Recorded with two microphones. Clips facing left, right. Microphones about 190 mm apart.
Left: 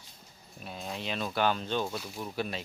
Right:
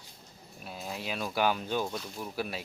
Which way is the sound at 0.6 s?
5° right (ahead or behind).